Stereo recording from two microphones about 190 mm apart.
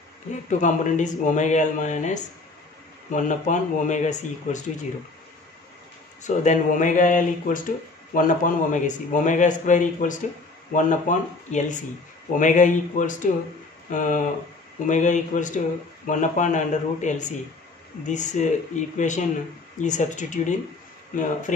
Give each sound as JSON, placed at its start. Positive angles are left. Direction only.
{"t": 0.5, "sound": "speech", "side_deg": 40}
{"t": 6.2, "sound": "speech", "side_deg": 40}